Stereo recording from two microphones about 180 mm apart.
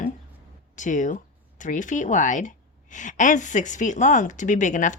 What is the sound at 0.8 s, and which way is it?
Speech, 45° left (ahead or behind).